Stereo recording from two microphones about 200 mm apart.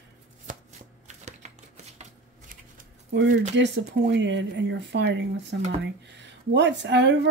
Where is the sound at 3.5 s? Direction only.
60° right (ahead or behind).